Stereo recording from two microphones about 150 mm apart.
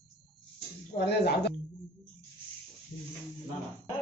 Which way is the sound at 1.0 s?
90° left.